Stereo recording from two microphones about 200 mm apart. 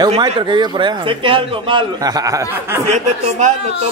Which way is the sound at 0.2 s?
20° right (ahead or behind).